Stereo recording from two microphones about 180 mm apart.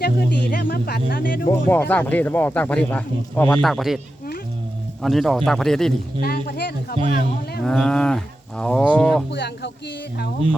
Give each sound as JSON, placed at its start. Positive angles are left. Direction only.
{"t": 0.0, "sound": "speech", "side_deg": 55}
{"t": 1.5, "sound": "speech", "side_deg": 10}
{"t": 5.0, "sound": "speech", "side_deg": 0}
{"t": 6.2, "sound": "speech", "side_deg": 60}
{"t": 7.6, "sound": "speech", "side_deg": 5}
{"t": 9.3, "sound": "speech", "side_deg": 70}